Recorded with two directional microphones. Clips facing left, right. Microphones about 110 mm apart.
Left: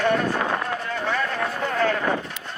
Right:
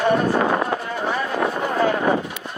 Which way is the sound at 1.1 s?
15° right (ahead or behind).